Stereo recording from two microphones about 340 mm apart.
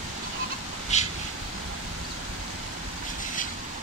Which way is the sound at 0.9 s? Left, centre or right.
Centre.